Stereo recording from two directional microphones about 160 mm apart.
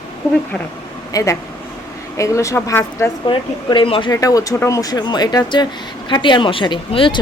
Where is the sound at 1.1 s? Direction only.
20° left (ahead or behind).